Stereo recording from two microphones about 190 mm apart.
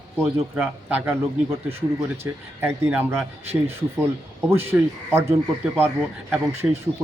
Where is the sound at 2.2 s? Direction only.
10° right (ahead or behind).